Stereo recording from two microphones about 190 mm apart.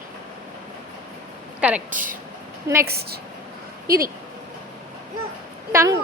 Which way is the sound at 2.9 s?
55° right (ahead or behind).